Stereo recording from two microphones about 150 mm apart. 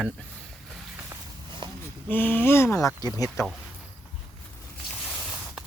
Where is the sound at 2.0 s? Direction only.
10° left (ahead or behind).